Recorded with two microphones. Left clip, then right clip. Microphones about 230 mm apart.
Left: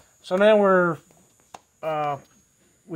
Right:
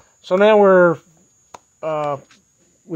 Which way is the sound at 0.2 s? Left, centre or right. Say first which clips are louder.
Right 5 dB; right.